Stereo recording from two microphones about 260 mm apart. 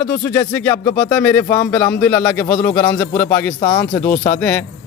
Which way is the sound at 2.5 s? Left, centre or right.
Left.